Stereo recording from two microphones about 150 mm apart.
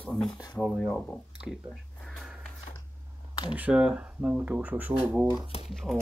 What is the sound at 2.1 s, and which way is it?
Sniff, 5° left (ahead or behind).